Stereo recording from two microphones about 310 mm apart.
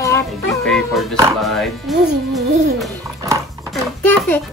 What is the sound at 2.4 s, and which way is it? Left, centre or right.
Music, right.